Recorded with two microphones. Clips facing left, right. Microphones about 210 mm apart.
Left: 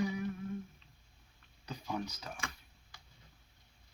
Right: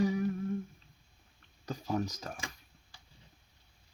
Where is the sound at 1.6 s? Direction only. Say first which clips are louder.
Right 6 dB; 40° right (ahead or behind).